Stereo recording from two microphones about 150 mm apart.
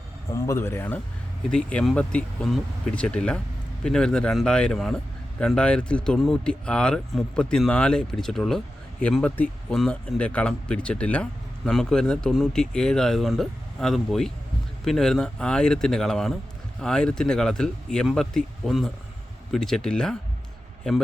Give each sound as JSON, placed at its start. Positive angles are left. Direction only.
{"t": 0.3, "sound": "speech", "side_deg": 20}